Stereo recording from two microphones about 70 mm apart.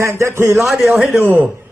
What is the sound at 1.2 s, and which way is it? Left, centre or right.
Speech, right.